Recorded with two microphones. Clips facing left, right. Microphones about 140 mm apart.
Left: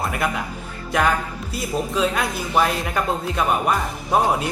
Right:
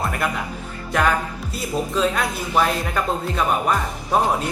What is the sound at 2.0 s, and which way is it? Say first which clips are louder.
A man's voice: right 1 dB; 5° left (ahead or behind).